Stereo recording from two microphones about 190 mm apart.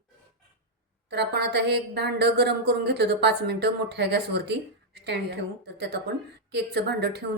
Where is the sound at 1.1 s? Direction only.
60° right (ahead or behind).